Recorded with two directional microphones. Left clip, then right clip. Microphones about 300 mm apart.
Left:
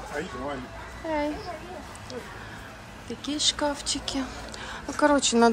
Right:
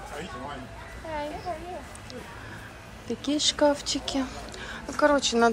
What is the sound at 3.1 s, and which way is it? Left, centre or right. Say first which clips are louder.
Speech: even; centre.